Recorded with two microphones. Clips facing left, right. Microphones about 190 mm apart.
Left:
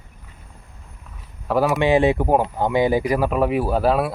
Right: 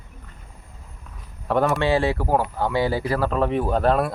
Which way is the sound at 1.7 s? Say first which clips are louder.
Left 4 dB; 20° left (ahead or behind).